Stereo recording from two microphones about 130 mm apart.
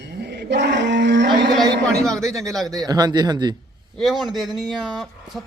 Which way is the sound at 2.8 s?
30° right (ahead or behind).